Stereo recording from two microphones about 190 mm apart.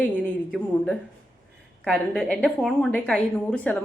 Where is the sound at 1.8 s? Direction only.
5° left (ahead or behind).